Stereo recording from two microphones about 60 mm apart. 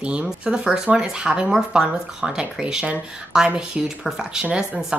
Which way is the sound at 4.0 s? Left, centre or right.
Centre.